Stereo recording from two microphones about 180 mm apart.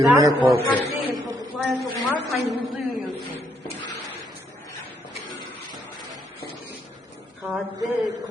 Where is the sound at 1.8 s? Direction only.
60° right (ahead or behind).